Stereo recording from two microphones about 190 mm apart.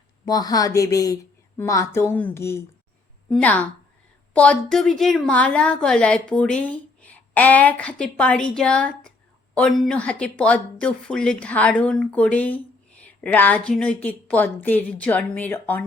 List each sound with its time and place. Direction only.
0.3 s a woman's voice: 20° left (ahead or behind)